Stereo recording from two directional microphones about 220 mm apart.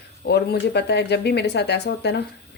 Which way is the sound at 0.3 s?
50° left (ahead or behind).